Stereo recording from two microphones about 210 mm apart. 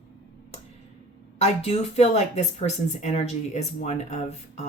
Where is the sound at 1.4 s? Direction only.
30° left (ahead or behind).